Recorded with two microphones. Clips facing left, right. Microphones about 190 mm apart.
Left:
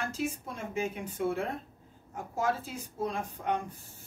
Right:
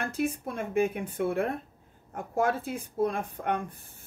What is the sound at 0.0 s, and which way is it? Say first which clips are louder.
Speech: right 4 dB; 55° right (ahead or behind).